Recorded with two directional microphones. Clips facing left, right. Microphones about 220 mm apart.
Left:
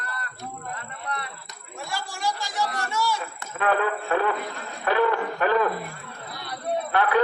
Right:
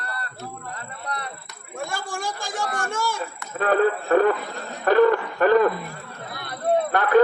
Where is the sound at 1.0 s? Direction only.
40° right (ahead or behind).